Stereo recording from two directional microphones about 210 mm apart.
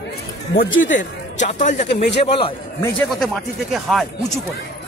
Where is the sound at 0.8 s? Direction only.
35° left (ahead or behind).